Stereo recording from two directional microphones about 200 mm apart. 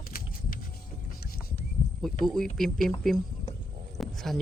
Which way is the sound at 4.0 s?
Centre (ahead or behind).